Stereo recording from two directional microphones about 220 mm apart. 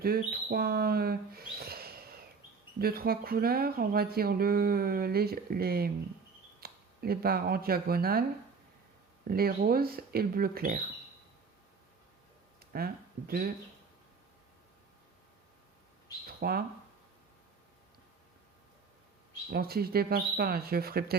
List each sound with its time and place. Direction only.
0.0 s a sound: 45° right (ahead or behind)
2.7 s speech: 45° right (ahead or behind)
9.2 s speech: 45° right (ahead or behind)
12.5 s speech: 45° right (ahead or behind)
16.2 s a sound: 45° right (ahead or behind)
19.5 s speech: 45° right (ahead or behind)